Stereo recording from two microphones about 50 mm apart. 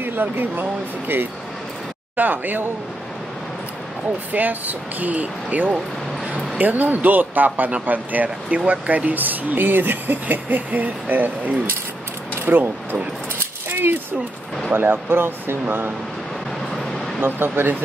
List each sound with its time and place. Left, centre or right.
0.0 s speech: right
4.3 s speech: right
12.4 s speech: right
13.7 s a sound: right
14.7 s speech: right
16.7 s vehicle: centre
17.2 s speech: right